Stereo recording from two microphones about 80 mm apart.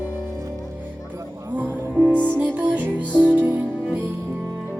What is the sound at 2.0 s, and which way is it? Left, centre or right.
Music, centre.